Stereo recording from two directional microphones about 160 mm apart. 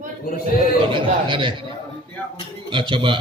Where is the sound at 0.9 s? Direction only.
30° right (ahead or behind).